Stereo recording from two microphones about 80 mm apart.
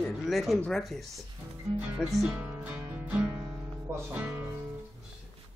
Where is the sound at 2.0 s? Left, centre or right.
Centre.